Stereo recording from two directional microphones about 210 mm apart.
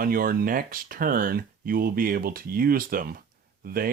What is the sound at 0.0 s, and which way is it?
Speech, 45° right (ahead or behind).